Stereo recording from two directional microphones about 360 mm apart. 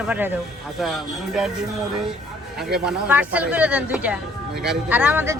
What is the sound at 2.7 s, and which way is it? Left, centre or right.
A man's voice, centre.